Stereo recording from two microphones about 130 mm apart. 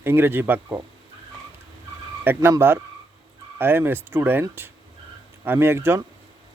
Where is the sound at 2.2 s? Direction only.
20° right (ahead or behind).